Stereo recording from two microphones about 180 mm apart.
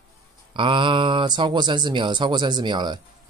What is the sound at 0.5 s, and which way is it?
Speech, 30° right (ahead or behind).